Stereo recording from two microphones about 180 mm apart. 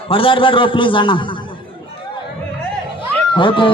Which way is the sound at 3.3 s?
25° left (ahead or behind).